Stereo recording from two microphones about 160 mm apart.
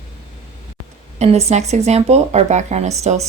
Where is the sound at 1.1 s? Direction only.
40° right (ahead or behind).